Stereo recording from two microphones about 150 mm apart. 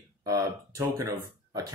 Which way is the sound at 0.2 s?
20° right (ahead or behind).